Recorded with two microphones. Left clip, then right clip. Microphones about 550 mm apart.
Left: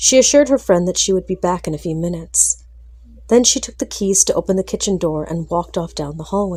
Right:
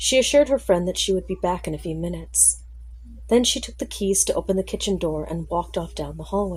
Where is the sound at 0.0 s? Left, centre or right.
Right.